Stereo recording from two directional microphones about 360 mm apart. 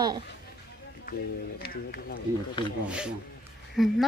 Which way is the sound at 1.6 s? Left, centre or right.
Left.